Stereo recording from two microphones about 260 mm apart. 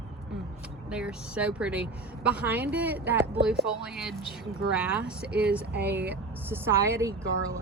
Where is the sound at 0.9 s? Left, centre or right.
Centre.